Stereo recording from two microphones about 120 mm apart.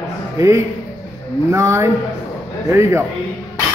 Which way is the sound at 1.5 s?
25° right (ahead or behind).